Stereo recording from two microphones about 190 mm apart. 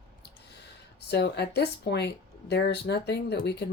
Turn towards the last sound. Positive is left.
turn(degrees=60)  # may be behind; listen again after turning